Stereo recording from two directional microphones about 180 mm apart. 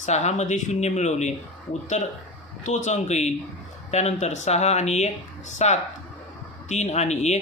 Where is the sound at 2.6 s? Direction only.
40° left (ahead or behind).